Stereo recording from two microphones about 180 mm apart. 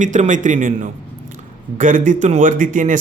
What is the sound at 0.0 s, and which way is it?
Speech, 45° right (ahead or behind).